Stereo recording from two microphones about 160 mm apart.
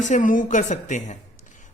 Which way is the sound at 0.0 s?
50° left (ahead or behind).